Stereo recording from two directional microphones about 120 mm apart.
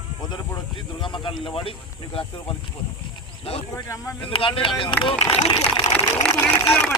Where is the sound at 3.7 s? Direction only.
25° left (ahead or behind).